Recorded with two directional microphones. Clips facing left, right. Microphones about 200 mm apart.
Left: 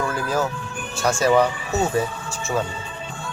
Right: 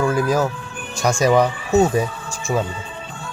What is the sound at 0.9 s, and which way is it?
Speech, 15° right (ahead or behind).